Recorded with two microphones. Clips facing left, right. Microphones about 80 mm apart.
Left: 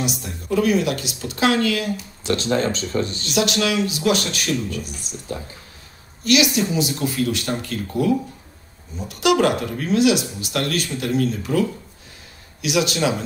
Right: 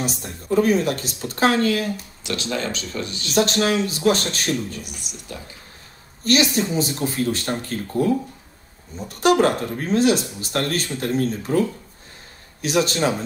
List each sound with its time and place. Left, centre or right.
0.0 s a woman's voice: right
2.2 s speech: left
3.3 s a woman's voice: right
6.5 s a woman's voice: right
12.6 s a woman's voice: right